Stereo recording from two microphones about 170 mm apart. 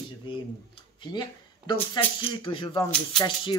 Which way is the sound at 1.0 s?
25° left (ahead or behind).